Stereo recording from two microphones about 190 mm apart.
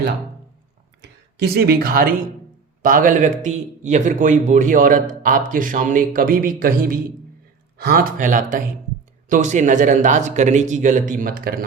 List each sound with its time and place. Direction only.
1.0 s a man's voice: 60° right (ahead or behind)